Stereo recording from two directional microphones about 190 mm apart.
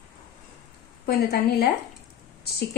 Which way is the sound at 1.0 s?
55° left (ahead or behind).